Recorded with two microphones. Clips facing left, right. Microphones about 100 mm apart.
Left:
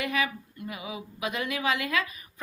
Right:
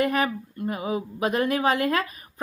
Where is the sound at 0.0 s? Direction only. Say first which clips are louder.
Right 6 dB; 40° right (ahead or behind).